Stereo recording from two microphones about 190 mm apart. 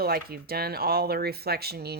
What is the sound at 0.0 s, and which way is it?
Speech, 55° right (ahead or behind).